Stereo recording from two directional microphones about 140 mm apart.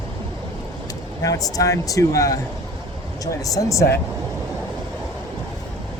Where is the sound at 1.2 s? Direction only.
25° left (ahead or behind).